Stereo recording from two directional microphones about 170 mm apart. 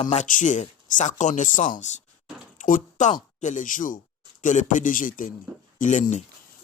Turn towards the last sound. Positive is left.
turn(degrees=45)  # may be behind; listen again after turning